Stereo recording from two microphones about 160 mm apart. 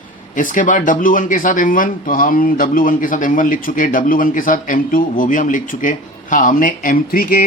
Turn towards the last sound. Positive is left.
turn(degrees=65)  # may be behind; listen again after turning